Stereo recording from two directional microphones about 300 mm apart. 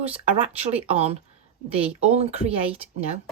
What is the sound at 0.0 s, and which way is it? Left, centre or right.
Speech, centre.